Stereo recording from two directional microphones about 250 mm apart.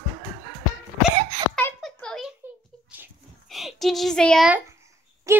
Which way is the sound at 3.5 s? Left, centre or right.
Centre.